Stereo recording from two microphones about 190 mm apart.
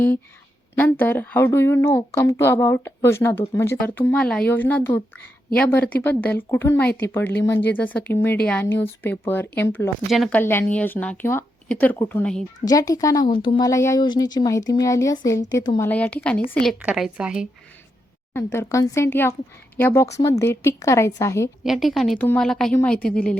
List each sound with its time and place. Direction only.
0.8 s speech: 10° left (ahead or behind)
12.6 s speech: 20° left (ahead or behind)
15.9 s a woman's voice: 10° left (ahead or behind)
18.3 s speech: 15° left (ahead or behind)
21.6 s a woman's voice: centre (ahead or behind)